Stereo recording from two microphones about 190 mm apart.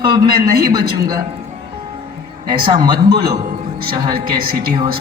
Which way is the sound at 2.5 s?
25° right (ahead or behind).